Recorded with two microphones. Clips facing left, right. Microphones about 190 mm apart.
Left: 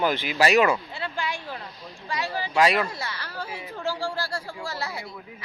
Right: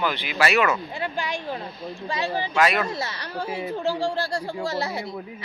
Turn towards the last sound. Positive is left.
turn(degrees=-25)  # may be behind; listen again after turning